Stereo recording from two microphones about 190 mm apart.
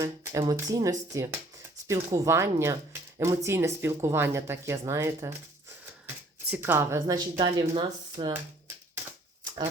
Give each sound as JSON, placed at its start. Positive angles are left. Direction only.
{"t": 0.0, "sound": "speech", "side_deg": -15}
{"t": 6.5, "sound": "speech", "side_deg": -10}